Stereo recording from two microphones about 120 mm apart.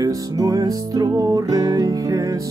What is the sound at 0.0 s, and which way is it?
Music, 30° right (ahead or behind).